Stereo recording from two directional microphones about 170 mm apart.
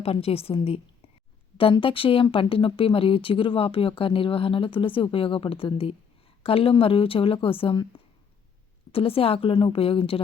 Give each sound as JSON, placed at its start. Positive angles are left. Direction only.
{"t": 0.0, "sound": "speech", "side_deg": 35}
{"t": 8.9, "sound": "speech", "side_deg": 35}